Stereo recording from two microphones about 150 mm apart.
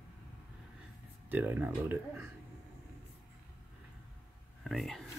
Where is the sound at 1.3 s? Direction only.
10° right (ahead or behind).